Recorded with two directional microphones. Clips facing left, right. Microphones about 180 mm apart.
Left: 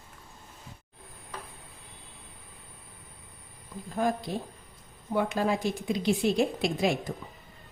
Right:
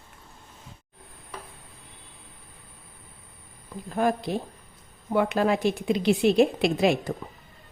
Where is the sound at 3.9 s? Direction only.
65° right (ahead or behind).